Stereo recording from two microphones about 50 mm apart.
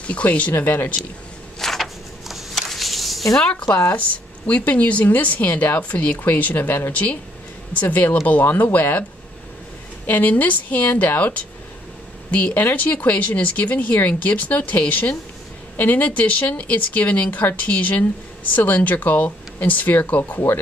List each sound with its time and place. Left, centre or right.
0.0 s speech: left
0.5 s speech: left
1.6 s a sound: centre
3.8 s speech: left
10.0 s speech: left